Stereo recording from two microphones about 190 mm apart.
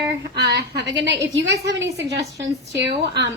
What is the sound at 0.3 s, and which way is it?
A woman's voice, 60° right (ahead or behind).